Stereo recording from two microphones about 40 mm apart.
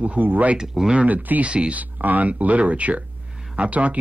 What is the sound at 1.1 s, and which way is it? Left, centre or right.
Speech, right.